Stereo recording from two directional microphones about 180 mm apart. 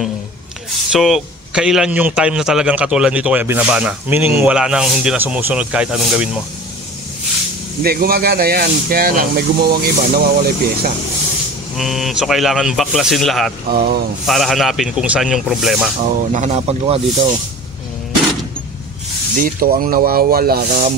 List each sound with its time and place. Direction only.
0.9 s a man's voice: centre (ahead or behind)
7.8 s speech: 55° right (ahead or behind)
11.7 s a man's voice: centre (ahead or behind)
13.7 s speech: 60° right (ahead or behind)
14.2 s a man's voice: centre (ahead or behind)
16.2 s speech: 40° right (ahead or behind)
19.3 s speech: 55° right (ahead or behind)